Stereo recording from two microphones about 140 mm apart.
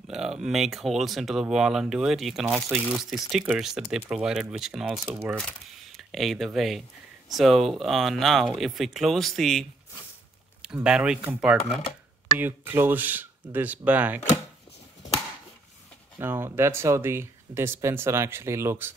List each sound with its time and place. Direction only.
0.1 s speech: 5° right (ahead or behind)
5.4 s speech: centre (ahead or behind)
12.4 s speech: 15° right (ahead or behind)
16.2 s speech: 15° right (ahead or behind)